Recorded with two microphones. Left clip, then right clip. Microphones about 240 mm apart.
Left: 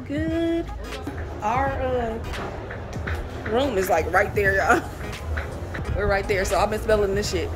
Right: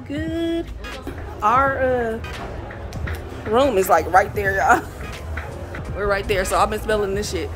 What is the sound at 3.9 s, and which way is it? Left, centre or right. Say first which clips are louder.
Speech: right 4 dB; centre.